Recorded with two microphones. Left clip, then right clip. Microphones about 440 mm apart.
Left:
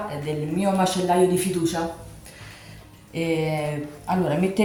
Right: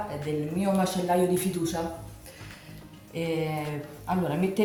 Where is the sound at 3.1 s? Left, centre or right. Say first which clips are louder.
Left 5 dB; right.